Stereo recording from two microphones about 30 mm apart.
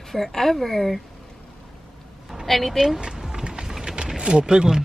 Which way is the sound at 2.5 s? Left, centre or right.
Centre.